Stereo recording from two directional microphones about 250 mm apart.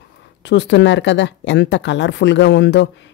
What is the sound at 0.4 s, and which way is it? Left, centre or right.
Speech, left.